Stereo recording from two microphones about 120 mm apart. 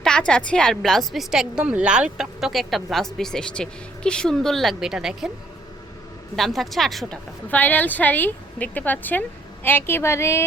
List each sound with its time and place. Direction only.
0.0 s a woman's voice: 5° left (ahead or behind)
6.3 s a woman's voice: centre (ahead or behind)
7.5 s a woman's voice: 15° left (ahead or behind)